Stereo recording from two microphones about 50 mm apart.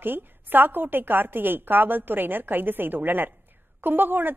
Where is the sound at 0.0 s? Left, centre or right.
Right.